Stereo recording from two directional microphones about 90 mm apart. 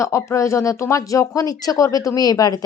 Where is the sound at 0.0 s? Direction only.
35° left (ahead or behind).